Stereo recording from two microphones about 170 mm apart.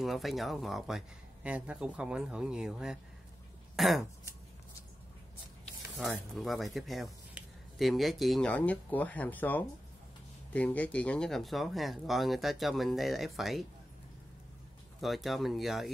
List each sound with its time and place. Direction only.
0.0 s speech: centre (ahead or behind)
5.9 s speech: centre (ahead or behind)
15.0 s speech: centre (ahead or behind)